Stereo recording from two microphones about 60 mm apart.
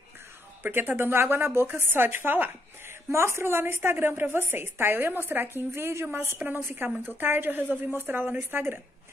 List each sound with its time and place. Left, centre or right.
0.6 s a woman's voice: right
2.9 s a woman's voice: right